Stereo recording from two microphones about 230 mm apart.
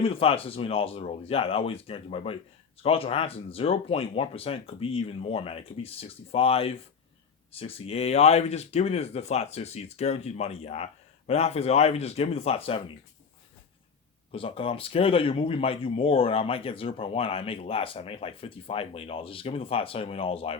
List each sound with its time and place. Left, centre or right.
0.0 s speech: left
14.3 s speech: left